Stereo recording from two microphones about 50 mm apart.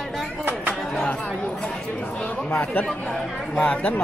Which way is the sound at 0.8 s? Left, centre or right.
Centre.